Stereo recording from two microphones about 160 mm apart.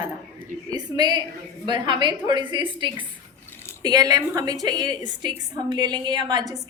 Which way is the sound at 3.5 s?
15° left (ahead or behind).